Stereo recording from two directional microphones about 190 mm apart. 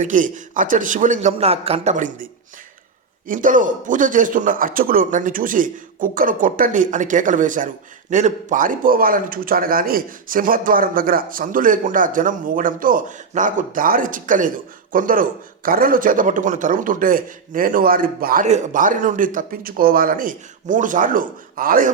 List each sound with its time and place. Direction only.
0.0 s a man's voice: 40° right (ahead or behind)
18.4 s a man's voice: 40° right (ahead or behind)